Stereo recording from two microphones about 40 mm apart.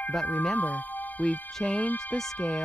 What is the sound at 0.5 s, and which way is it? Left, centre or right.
Speech, left.